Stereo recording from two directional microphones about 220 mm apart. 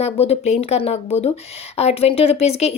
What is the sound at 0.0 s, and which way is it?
A woman's voice, 25° left (ahead or behind).